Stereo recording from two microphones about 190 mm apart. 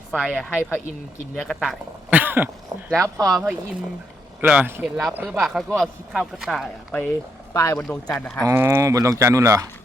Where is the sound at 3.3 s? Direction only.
5° right (ahead or behind).